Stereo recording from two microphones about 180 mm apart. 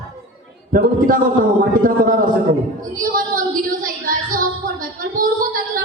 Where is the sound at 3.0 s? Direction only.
50° right (ahead or behind).